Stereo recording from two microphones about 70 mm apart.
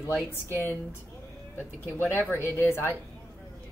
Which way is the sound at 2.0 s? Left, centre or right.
Left.